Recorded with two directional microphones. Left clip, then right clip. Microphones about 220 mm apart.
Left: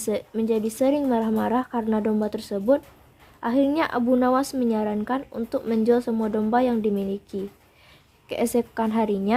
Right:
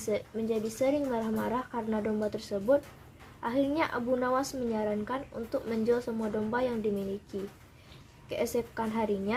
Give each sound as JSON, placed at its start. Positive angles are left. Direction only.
{"t": 0.0, "sound": "speech", "side_deg": 40}